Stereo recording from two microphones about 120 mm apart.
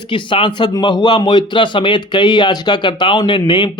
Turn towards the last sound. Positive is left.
turn(degrees=40)  # may be behind; listen again after turning